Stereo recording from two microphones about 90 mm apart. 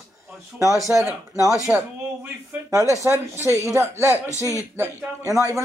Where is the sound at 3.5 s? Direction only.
35° left (ahead or behind).